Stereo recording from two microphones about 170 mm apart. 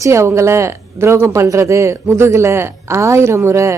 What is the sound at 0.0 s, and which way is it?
A woman's voice, 15° right (ahead or behind).